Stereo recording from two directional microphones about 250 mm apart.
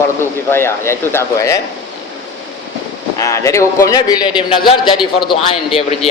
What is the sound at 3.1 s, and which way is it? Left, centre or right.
A man's voice, centre.